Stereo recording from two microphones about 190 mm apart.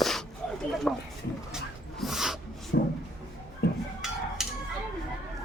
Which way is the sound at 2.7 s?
60° left (ahead or behind).